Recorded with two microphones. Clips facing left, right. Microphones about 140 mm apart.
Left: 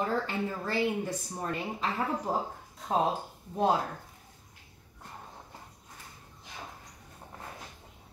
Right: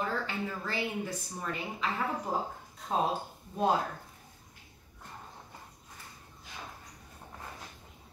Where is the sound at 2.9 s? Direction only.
10° left (ahead or behind).